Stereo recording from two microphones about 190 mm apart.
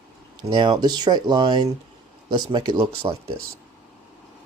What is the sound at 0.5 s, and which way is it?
Speech, 25° right (ahead or behind).